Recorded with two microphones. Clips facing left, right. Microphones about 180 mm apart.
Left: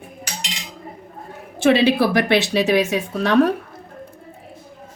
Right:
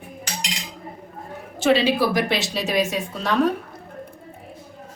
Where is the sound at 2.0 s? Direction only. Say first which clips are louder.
Left 4 dB; 65° left (ahead or behind).